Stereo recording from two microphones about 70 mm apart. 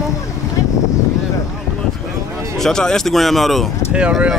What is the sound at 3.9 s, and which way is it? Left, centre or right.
Speech, centre.